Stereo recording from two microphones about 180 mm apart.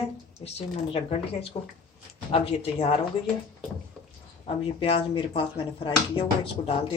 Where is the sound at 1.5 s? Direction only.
30° left (ahead or behind).